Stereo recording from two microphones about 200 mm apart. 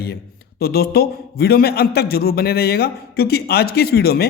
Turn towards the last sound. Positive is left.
turn(degrees=50)  # may be behind; listen again after turning